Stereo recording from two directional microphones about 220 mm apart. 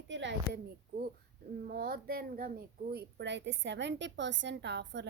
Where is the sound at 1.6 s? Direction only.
40° right (ahead or behind).